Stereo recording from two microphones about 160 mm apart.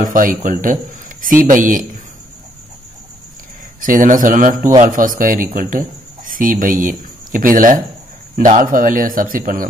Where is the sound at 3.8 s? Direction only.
55° right (ahead or behind).